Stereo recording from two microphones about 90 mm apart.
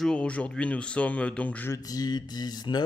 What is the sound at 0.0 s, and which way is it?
Speech, 10° left (ahead or behind).